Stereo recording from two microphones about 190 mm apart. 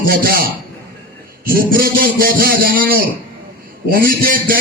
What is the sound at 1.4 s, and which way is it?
A man's voice, 50° right (ahead or behind).